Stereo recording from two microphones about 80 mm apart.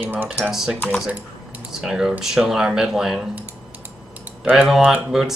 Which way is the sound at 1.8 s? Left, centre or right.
Centre.